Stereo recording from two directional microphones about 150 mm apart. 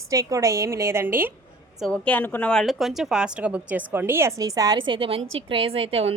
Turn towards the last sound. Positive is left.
turn(degrees=-40)  # may be behind; listen again after turning